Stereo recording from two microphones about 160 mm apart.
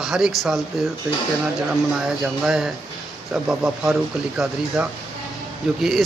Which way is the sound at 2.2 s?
5° right (ahead or behind).